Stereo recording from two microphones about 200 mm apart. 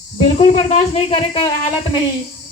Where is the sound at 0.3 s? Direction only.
30° left (ahead or behind).